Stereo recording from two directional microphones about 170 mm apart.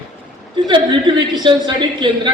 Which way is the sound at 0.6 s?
25° right (ahead or behind).